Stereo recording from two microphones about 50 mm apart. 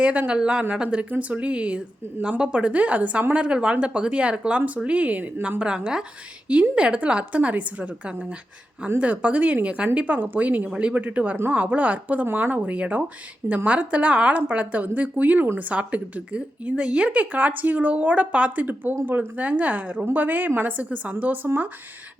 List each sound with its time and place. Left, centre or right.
0.0 s speech: right
5.4 s a woman's voice: right
12.5 s speech: right
18.6 s speech: right
21.4 s speech: right